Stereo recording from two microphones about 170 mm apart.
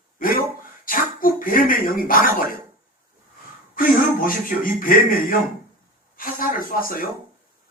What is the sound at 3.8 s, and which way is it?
Speech, 55° left (ahead or behind).